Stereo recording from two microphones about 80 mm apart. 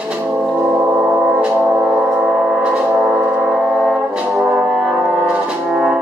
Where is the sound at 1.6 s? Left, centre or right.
Centre.